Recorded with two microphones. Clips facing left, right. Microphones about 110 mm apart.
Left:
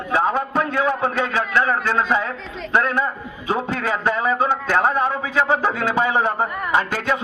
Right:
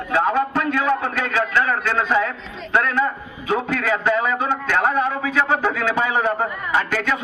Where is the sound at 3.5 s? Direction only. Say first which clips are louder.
Right 1 dB; 30° left (ahead or behind).